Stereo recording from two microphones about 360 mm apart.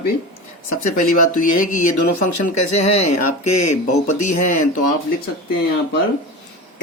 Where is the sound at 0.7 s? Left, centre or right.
Left.